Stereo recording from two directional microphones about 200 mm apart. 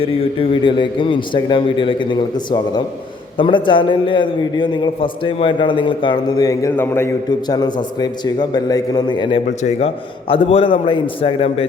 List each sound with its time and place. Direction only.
0.0 s a man's voice: 25° left (ahead or behind)